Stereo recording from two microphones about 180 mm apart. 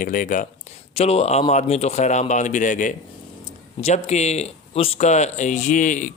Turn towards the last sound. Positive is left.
turn(degrees=45)  # may be behind; listen again after turning